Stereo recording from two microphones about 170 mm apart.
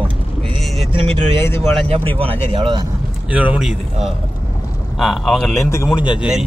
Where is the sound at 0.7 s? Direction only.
35° right (ahead or behind).